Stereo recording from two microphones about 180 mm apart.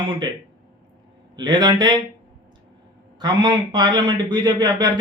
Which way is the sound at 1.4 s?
25° right (ahead or behind).